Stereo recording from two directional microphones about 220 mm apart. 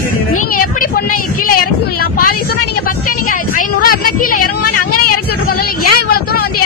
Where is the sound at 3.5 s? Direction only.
40° left (ahead or behind).